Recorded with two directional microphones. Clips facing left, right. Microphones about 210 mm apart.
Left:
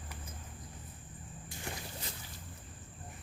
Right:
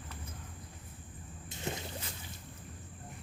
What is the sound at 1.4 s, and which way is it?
Rowboat, 20° right (ahead or behind).